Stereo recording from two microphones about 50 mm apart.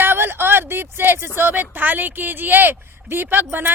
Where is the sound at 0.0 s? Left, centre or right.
Right.